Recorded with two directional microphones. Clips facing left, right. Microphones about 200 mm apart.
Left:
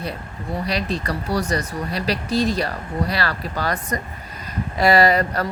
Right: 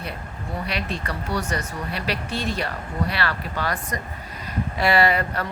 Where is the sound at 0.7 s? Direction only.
35° left (ahead or behind).